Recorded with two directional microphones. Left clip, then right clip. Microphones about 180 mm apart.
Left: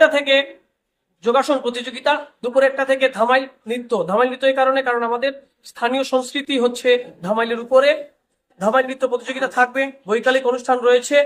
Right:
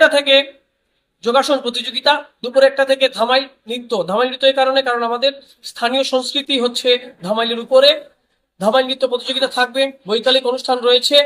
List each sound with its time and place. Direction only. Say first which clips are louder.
0.0 s speech: right 3 dB; centre (ahead or behind)